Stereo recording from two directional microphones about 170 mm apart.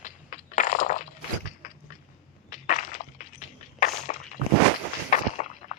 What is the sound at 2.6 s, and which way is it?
Walk, 50° left (ahead or behind).